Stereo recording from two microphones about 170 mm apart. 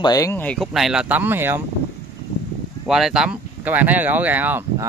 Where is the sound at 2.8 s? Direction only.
Centre (ahead or behind).